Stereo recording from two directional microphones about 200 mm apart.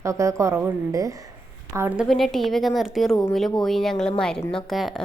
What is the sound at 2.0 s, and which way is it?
Speech, centre (ahead or behind).